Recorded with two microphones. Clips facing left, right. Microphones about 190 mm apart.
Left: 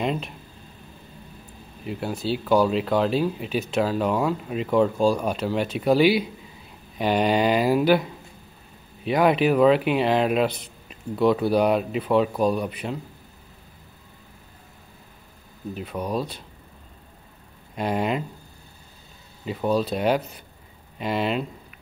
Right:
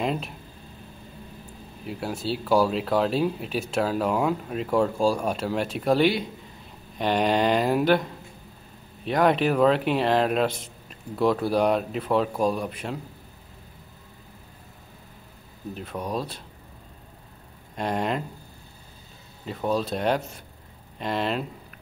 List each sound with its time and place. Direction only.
0.0 s speech: centre (ahead or behind)
1.9 s a man's voice: centre (ahead or behind)
15.7 s a man's voice: centre (ahead or behind)
17.7 s a man's voice: 5° left (ahead or behind)
19.4 s a man's voice: 5° left (ahead or behind)